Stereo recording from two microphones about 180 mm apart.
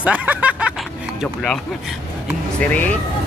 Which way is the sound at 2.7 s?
10° left (ahead or behind).